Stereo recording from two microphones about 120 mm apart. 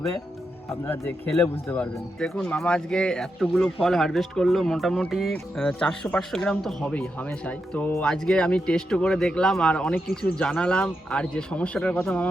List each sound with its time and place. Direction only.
1.6 s speech: 15° left (ahead or behind)
2.1 s speech: 5° left (ahead or behind)